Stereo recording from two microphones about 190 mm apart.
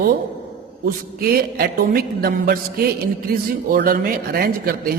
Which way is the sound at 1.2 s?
55° right (ahead or behind).